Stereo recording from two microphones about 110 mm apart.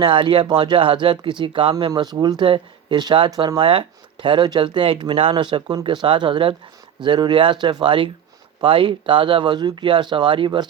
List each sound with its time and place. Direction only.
0.0 s speech: 50° right (ahead or behind)